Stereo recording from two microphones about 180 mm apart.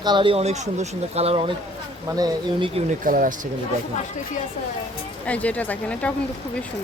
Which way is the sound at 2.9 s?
50° right (ahead or behind).